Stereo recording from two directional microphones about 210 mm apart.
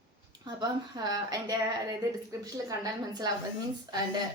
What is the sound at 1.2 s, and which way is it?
A woman's voice, 20° right (ahead or behind).